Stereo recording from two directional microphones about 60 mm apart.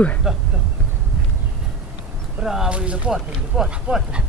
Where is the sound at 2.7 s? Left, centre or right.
Right.